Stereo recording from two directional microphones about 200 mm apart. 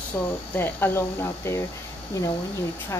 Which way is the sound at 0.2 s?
10° left (ahead or behind).